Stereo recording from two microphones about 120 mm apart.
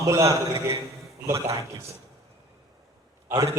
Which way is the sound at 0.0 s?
25° right (ahead or behind).